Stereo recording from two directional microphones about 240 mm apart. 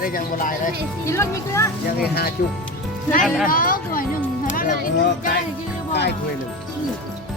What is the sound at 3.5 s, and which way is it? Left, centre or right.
Music, left.